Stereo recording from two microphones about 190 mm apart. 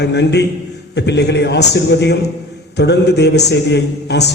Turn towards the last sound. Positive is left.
turn(degrees=60)  # may be behind; listen again after turning